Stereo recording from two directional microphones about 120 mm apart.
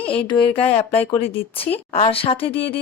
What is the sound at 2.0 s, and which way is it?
Speech, 50° left (ahead or behind).